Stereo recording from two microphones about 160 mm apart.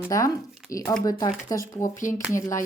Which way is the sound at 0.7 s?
20° left (ahead or behind).